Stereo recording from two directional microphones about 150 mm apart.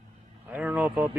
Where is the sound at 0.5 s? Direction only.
10° right (ahead or behind).